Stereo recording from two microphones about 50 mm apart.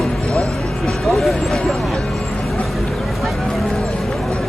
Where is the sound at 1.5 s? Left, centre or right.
Centre.